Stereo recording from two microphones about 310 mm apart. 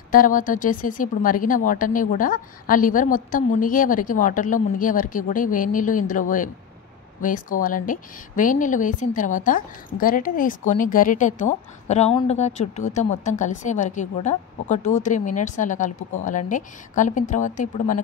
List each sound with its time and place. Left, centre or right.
0.1 s a woman's voice: left